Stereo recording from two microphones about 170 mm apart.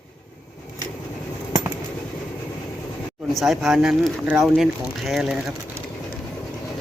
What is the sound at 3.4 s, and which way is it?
Speech, centre (ahead or behind).